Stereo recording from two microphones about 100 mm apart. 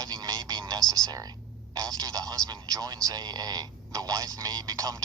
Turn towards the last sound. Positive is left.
turn(degrees=-40)  # may be behind; listen again after turning